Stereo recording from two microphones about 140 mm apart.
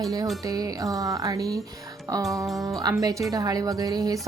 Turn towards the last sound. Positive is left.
turn(degrees=-25)  # may be behind; listen again after turning